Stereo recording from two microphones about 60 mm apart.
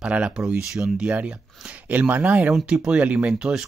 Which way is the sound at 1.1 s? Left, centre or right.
Right.